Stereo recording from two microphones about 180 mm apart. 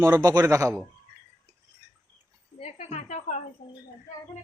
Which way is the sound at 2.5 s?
35° left (ahead or behind).